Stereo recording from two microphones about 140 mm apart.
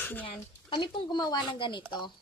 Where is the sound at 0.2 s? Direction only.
35° left (ahead or behind).